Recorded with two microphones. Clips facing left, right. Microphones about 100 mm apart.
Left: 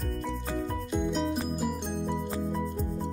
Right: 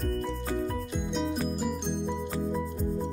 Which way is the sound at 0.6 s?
Centre (ahead or behind).